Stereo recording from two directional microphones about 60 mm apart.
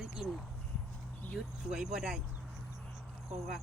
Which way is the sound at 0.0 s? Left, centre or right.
Centre.